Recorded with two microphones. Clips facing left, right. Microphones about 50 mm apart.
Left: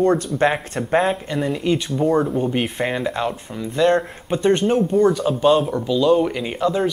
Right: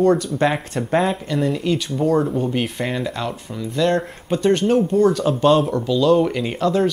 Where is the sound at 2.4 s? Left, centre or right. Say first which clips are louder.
Left 1 dB; centre.